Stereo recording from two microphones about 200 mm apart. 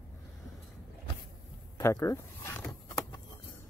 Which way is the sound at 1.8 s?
15° left (ahead or behind).